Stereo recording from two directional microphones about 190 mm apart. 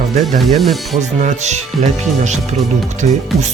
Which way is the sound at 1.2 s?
35° right (ahead or behind).